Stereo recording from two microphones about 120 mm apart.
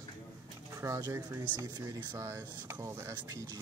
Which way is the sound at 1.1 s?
15° right (ahead or behind).